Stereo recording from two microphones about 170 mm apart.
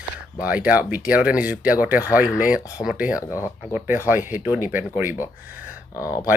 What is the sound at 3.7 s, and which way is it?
Speech, 10° right (ahead or behind).